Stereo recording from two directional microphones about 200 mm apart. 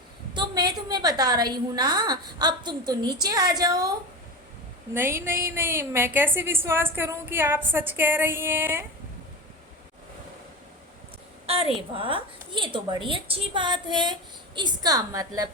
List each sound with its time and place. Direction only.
0.3 s a woman's voice: 20° right (ahead or behind)
4.9 s a woman's voice: 10° right (ahead or behind)
11.4 s a woman's voice: 30° right (ahead or behind)